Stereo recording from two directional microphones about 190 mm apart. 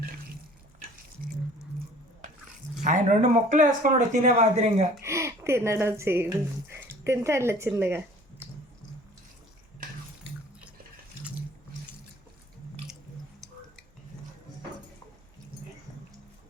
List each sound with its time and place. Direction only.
2.8 s speech: 40° right (ahead or behind)
5.0 s speech: 15° right (ahead or behind)
7.7 s a sound: 10° right (ahead or behind)